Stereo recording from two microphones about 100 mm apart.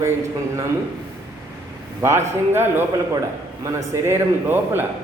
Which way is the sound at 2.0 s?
25° right (ahead or behind).